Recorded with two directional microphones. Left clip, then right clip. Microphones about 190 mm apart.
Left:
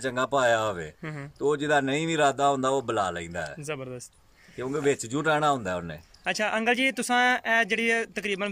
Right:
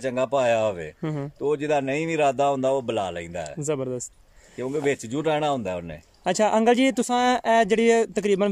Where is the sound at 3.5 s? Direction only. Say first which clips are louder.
Right 8 dB; 30° right (ahead or behind).